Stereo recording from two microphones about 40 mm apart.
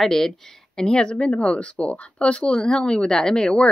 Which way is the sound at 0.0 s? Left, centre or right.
Centre.